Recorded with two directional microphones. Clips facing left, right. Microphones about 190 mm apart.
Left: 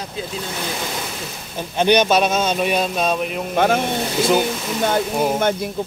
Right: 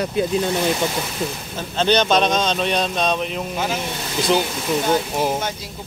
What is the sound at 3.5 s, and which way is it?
Speech, 60° left (ahead or behind).